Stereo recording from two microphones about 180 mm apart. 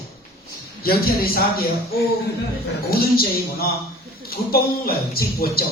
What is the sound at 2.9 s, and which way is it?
Speech, 55° left (ahead or behind).